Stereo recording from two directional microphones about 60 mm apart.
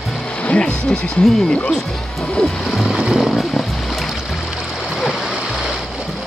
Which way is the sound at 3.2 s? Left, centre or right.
Centre.